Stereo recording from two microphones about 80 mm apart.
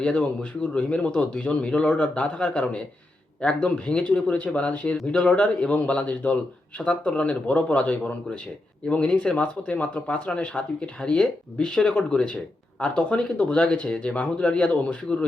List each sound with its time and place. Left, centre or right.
0.0 s speech: centre